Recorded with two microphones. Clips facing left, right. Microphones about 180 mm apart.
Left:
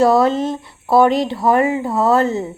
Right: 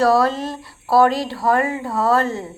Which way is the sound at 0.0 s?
20° left (ahead or behind).